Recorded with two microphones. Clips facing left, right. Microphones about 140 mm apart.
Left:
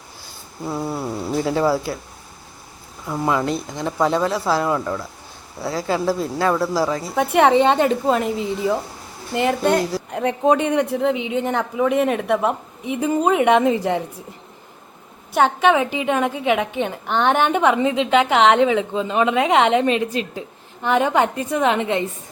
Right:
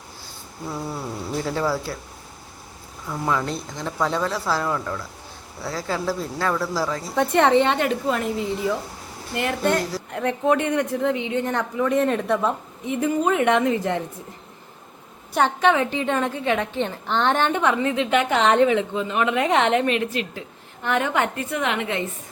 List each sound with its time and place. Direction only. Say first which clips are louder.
0.7 s insect: left 5 dB; 30° left (ahead or behind)
1.5 s speech: left 5 dB; 15° left (ahead or behind)
3.1 s a woman's voice: left 4 dB; 15° left (ahead or behind)
15.3 s speech: left 3 dB; centre (ahead or behind); by 18.1 s 20° left (ahead or behind)
18.2 s a woman's voice: left 3 dB; 90° left
18.8 s a woman's voice: left 3 dB; 25° left (ahead or behind)